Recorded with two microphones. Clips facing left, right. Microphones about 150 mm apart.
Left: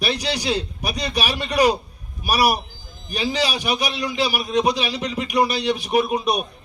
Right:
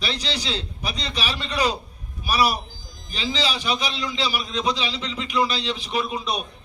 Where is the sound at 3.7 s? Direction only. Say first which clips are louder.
Left 4 dB; 10° left (ahead or behind).